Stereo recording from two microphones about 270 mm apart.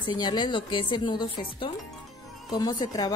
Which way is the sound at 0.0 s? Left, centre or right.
Centre.